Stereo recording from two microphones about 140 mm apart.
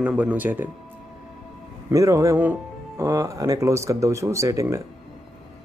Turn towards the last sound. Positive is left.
turn(degrees=-20)  # may be behind; listen again after turning